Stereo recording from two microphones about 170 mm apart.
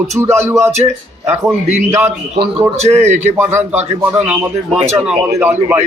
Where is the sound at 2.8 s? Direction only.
45° right (ahead or behind).